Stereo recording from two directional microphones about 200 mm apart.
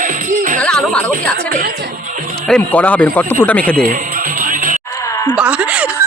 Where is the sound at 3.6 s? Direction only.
45° right (ahead or behind).